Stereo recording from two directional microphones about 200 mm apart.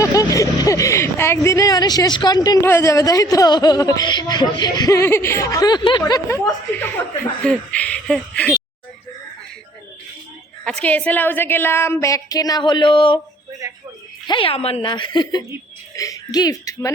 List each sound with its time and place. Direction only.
0.0 s speech: 15° left (ahead or behind)
10.6 s speech: 5° left (ahead or behind); by 13.1 s 25° left (ahead or behind)
14.3 s a woman's voice: 25° left (ahead or behind)